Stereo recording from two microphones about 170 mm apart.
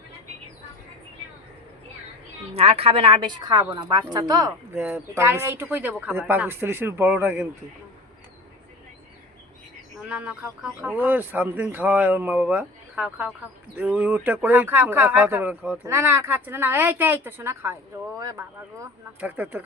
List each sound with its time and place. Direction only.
2.5 s a woman's voice: 35° right (ahead or behind); by 7.4 s 10° right (ahead or behind)
10.1 s speech: 10° right (ahead or behind)